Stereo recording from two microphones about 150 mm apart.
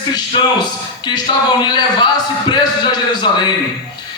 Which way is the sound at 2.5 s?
30° left (ahead or behind).